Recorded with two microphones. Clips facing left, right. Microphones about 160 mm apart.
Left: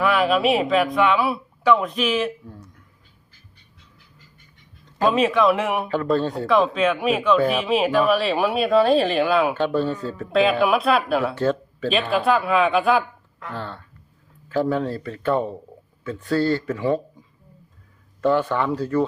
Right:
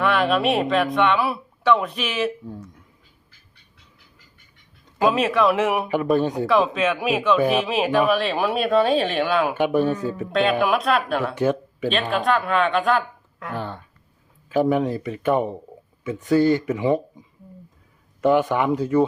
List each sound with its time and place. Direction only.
0.0 s speech: centre (ahead or behind)
5.0 s speech: centre (ahead or behind)
5.9 s speech: 15° right (ahead or behind)
6.5 s speech: centre (ahead or behind)
9.6 s speech: 15° right (ahead or behind)
10.3 s speech: centre (ahead or behind)
11.3 s speech: 15° right (ahead or behind)
12.1 s speech: centre (ahead or behind)
13.5 s speech: 15° right (ahead or behind)